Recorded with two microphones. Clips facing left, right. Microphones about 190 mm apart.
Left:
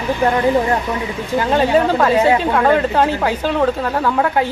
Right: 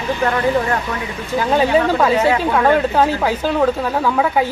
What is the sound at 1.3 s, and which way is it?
Speech, 5° right (ahead or behind).